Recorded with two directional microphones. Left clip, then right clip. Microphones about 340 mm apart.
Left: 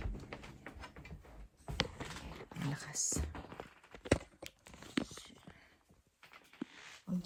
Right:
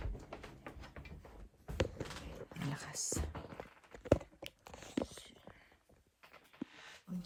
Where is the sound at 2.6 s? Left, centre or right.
Centre.